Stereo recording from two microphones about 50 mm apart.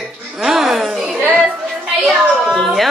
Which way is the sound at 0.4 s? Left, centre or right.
Centre.